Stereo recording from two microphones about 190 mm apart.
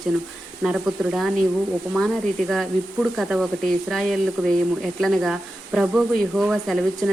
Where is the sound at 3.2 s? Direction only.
5° right (ahead or behind).